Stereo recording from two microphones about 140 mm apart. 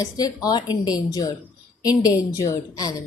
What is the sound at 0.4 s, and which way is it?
Speech, 30° left (ahead or behind).